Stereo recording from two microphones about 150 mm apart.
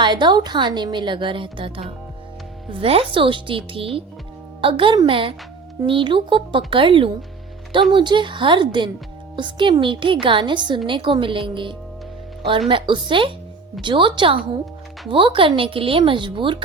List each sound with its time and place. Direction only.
0.0 s a woman's voice: 30° right (ahead or behind)